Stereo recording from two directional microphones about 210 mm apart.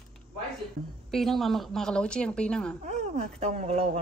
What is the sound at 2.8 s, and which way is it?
Speech, 30° right (ahead or behind).